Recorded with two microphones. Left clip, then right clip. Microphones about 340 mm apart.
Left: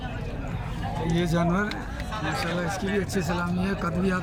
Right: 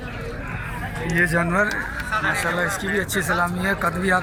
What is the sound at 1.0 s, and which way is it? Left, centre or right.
A man's voice, centre.